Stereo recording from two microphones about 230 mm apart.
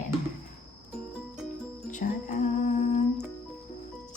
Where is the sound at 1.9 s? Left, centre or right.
Left.